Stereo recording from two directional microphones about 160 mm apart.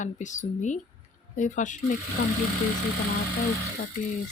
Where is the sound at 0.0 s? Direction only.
50° left (ahead or behind).